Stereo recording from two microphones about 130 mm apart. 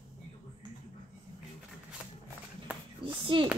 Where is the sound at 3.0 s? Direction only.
40° right (ahead or behind).